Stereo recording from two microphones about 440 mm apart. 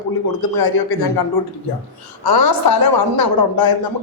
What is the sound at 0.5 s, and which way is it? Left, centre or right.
Speech, left.